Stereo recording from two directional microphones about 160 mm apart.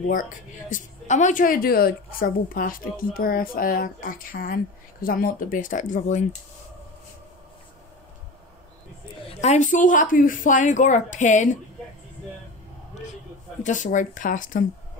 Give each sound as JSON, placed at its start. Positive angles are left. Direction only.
{"t": 0.1, "sound": "a woman's voice", "side_deg": 55}
{"t": 9.3, "sound": "a woman's voice", "side_deg": 45}
{"t": 13.6, "sound": "a woman's voice", "side_deg": 50}